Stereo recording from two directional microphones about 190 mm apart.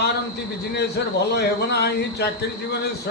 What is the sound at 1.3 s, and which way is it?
Speech, 60° left (ahead or behind).